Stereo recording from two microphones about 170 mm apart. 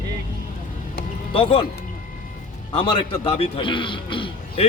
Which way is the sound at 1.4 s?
30° left (ahead or behind).